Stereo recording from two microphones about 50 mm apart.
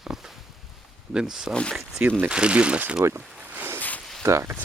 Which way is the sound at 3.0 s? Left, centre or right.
Right.